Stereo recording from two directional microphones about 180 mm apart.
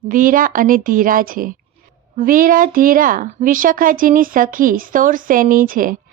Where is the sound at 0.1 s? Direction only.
50° right (ahead or behind).